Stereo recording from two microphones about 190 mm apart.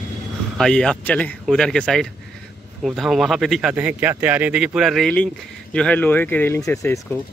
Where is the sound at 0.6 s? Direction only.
5° left (ahead or behind).